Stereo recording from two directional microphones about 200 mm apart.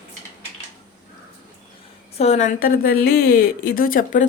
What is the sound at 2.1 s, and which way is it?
A woman's voice, 35° left (ahead or behind).